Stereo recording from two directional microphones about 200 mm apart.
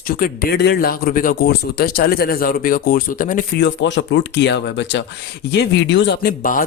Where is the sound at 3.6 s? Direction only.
60° left (ahead or behind).